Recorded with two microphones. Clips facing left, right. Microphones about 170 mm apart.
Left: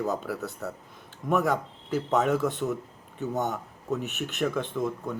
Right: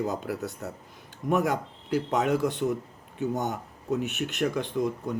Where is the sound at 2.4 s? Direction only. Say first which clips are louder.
Right 1 dB; 15° right (ahead or behind).